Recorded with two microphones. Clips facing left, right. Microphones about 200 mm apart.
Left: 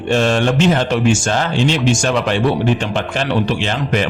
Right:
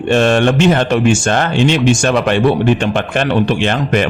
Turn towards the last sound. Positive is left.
turn(degrees=-55)  # may be behind; listen again after turning